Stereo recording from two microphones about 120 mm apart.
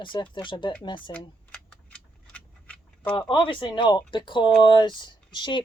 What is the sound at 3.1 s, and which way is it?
Speech, 40° left (ahead or behind).